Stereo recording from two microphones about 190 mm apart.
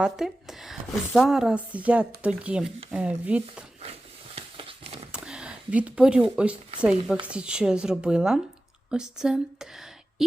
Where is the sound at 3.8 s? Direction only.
30° right (ahead or behind).